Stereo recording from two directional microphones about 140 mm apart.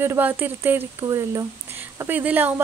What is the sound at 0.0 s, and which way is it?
Speech, 15° right (ahead or behind).